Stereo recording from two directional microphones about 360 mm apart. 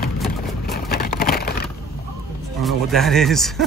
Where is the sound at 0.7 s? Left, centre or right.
Left.